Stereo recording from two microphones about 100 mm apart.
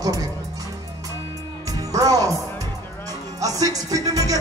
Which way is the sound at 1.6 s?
35° right (ahead or behind).